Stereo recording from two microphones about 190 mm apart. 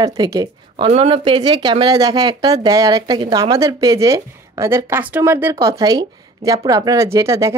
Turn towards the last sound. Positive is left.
turn(degrees=-15)  # may be behind; listen again after turning